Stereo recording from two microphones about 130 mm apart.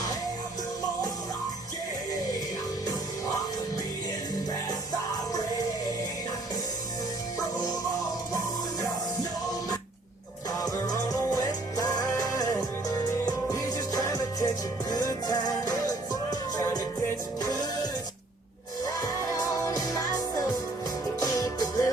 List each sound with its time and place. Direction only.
10.6 s music: 30° left (ahead or behind)
19.3 s music: 25° left (ahead or behind)